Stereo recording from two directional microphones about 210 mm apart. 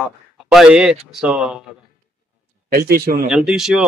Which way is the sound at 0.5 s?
Centre (ahead or behind).